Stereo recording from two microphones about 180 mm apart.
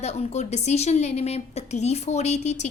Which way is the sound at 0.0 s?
40° left (ahead or behind).